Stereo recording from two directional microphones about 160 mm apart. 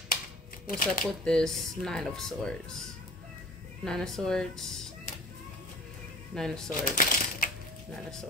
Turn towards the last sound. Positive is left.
turn(degrees=60)  # may be behind; listen again after turning